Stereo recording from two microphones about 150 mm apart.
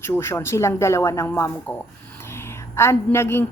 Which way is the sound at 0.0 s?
15° left (ahead or behind).